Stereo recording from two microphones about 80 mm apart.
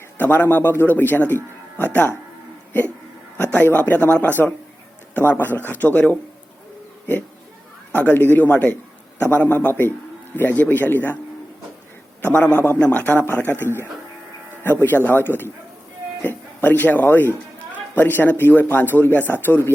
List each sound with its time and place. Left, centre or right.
0.2 s a man's voice: left
3.5 s a man's voice: left
7.9 s a man's voice: left
12.2 s a man's voice: centre
14.8 s a man's voice: left